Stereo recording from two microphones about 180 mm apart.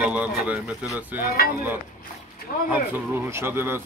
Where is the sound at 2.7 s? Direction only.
10° right (ahead or behind).